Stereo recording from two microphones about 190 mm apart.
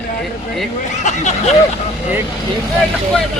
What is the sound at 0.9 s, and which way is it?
Speech, 40° left (ahead or behind).